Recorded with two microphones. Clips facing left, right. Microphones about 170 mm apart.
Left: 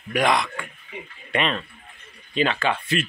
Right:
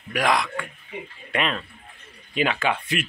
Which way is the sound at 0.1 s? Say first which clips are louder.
Left 1 dB; centre (ahead or behind).